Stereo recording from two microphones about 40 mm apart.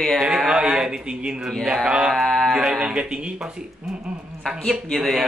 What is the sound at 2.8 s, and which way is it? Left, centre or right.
Speech, right.